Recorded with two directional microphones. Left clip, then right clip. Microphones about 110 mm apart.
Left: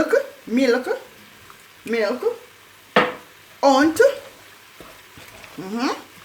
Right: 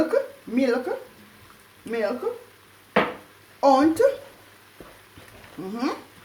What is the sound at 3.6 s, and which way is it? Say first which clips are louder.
Speech: left 3 dB; 35° left (ahead or behind).